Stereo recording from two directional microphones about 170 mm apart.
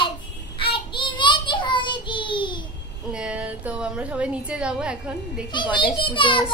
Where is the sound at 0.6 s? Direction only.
30° left (ahead or behind).